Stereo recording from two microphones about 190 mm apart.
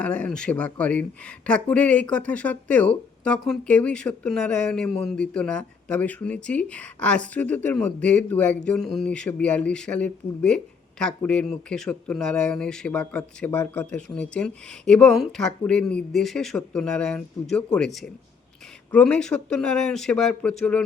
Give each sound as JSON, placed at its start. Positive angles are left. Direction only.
{"t": 0.0, "sound": "speech", "side_deg": 5}
{"t": 18.9, "sound": "speech", "side_deg": 5}